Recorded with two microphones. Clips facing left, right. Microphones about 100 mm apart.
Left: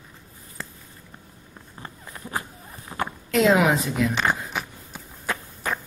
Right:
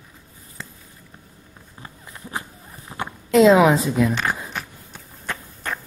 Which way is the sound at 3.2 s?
25° right (ahead or behind).